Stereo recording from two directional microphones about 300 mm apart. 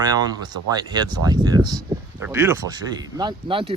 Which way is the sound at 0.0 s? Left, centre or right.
Centre.